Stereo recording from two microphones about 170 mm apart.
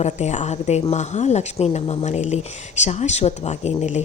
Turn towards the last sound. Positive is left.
turn(degrees=40)  # may be behind; listen again after turning